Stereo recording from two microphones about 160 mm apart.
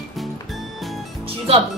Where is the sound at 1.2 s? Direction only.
40° right (ahead or behind).